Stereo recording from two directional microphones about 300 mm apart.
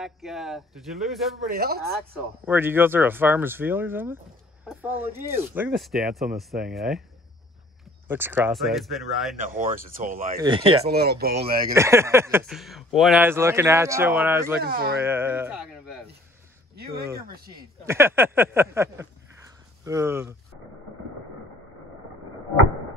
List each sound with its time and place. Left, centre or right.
0.0 s speech: centre
1.5 s speech: right
2.1 s speech: centre
8.1 s speech: centre
9.4 s speech: right
10.4 s speech: centre
10.9 s speech: right
11.7 s speech: centre
14.6 s speech: right
15.0 s speech: centre
16.7 s speech: right
17.8 s speech: centre